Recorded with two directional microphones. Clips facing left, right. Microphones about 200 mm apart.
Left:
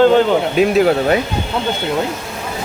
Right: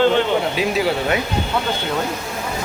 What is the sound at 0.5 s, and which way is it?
Speech, 50° left (ahead or behind).